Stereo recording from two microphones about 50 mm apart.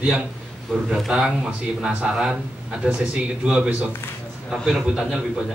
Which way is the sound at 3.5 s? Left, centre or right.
Centre.